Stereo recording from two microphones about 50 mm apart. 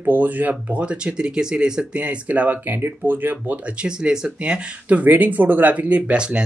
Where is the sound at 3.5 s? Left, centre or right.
Centre.